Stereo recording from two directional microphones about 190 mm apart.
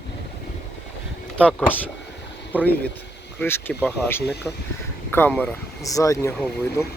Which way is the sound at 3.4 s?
10° left (ahead or behind).